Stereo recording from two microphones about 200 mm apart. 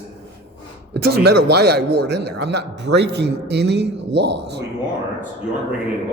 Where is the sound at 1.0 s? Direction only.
55° right (ahead or behind).